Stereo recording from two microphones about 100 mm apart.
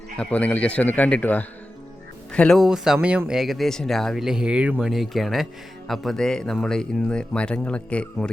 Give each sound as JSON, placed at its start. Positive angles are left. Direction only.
{"t": 0.2, "sound": "speech", "side_deg": 15}
{"t": 2.6, "sound": "speech", "side_deg": -5}
{"t": 4.9, "sound": "speech", "side_deg": 0}